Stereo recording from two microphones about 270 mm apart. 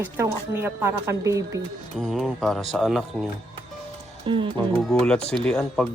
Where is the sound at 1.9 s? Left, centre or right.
Centre.